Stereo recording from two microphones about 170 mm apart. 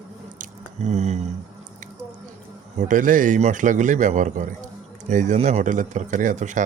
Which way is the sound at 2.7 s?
50° right (ahead or behind).